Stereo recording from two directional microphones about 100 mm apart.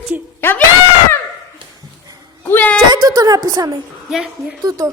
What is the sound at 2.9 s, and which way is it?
A woman's voice, 40° right (ahead or behind).